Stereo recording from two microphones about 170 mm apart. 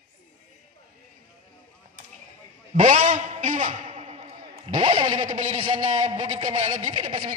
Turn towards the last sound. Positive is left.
turn(degrees=-30)  # may be behind; listen again after turning